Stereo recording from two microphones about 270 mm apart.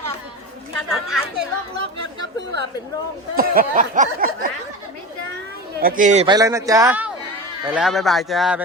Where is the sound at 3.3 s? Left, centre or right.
Right.